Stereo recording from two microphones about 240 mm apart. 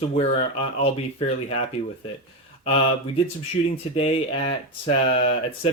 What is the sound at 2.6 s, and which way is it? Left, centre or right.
Speech, left.